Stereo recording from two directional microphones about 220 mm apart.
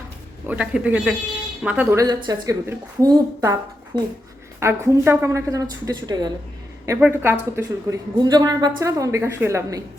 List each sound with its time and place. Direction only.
0.4 s a woman's voice: 5° right (ahead or behind)